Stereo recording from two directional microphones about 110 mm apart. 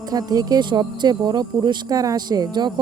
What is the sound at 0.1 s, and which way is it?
Speech, 35° right (ahead or behind).